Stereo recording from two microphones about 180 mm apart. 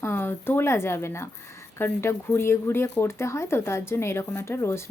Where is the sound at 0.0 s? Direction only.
15° left (ahead or behind).